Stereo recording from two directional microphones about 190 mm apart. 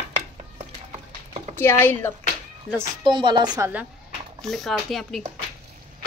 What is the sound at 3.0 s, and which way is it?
Speech, 25° right (ahead or behind).